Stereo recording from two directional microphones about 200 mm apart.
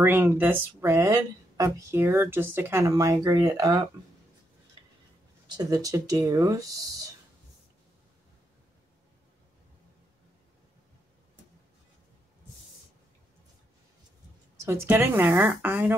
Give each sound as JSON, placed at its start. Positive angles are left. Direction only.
{"t": 0.0, "sound": "speech", "side_deg": -10}
{"t": 5.7, "sound": "speech", "side_deg": -15}
{"t": 14.6, "sound": "speech", "side_deg": -15}